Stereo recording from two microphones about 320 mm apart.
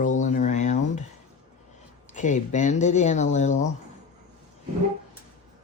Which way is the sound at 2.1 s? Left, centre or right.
Left.